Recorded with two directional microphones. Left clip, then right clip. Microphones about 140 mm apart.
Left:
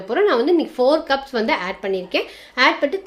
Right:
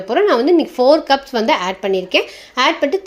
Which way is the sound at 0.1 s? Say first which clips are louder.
Right 4 dB; 35° right (ahead or behind).